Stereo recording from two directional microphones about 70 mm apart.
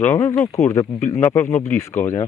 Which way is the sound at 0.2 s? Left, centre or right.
Left.